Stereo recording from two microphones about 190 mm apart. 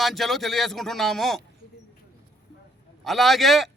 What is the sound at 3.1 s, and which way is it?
Speech, centre (ahead or behind).